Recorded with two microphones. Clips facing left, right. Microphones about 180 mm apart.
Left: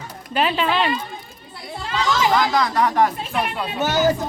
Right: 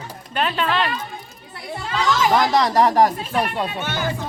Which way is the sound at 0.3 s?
5° left (ahead or behind).